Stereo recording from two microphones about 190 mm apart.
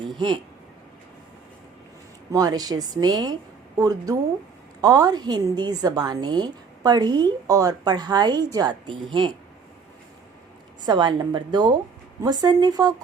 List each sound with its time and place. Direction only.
0.0 s a sound: 25° right (ahead or behind)
2.3 s a woman's voice: 20° right (ahead or behind)
10.8 s a woman's voice: 25° right (ahead or behind)